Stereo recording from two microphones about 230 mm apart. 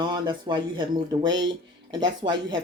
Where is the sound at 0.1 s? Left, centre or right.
Centre.